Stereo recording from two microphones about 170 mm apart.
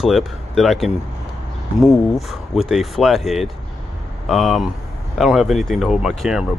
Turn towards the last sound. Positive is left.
turn(degrees=-5)  # may be behind; listen again after turning